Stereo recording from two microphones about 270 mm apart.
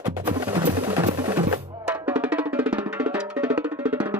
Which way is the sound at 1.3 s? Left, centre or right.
Centre.